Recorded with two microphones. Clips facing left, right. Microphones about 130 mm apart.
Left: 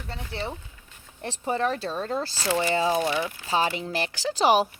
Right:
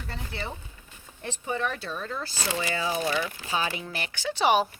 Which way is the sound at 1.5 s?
35° left (ahead or behind).